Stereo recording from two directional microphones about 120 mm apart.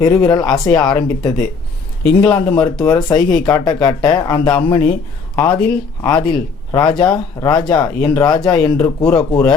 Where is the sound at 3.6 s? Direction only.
35° left (ahead or behind).